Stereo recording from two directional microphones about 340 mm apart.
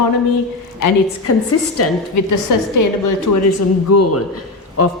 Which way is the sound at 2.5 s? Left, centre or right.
Left.